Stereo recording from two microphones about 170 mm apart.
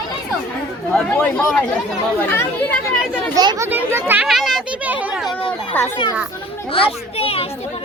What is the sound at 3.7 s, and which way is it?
Speech, 10° right (ahead or behind).